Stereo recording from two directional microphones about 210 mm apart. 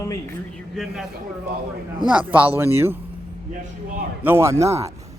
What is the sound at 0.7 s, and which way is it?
Speech, centre (ahead or behind).